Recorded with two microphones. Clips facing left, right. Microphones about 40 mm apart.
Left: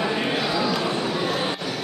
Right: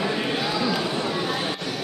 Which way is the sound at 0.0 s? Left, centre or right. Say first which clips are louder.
Left 1 dB; centre.